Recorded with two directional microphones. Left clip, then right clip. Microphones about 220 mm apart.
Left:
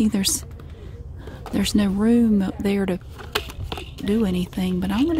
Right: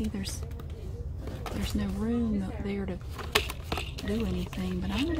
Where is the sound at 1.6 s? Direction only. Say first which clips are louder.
Left 14 dB; 45° left (ahead or behind).